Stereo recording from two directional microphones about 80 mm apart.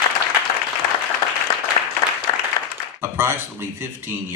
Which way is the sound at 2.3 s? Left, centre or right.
Left.